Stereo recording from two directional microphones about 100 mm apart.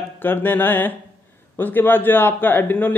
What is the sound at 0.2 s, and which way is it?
A man's voice, 20° left (ahead or behind).